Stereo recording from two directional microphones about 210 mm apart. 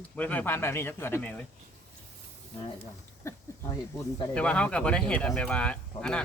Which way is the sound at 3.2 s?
15° left (ahead or behind).